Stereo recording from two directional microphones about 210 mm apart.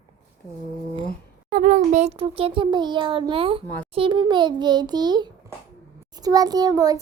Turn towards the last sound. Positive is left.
turn(degrees=-15)  # may be behind; listen again after turning